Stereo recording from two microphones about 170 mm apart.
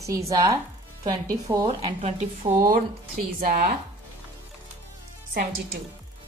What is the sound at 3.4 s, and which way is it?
Speech, 60° right (ahead or behind).